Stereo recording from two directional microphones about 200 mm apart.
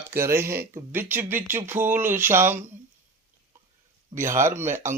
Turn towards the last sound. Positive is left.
turn(degrees=-10)  # may be behind; listen again after turning